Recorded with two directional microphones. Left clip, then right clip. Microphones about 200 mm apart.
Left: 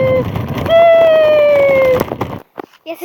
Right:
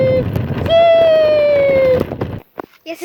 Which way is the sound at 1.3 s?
50° left (ahead or behind).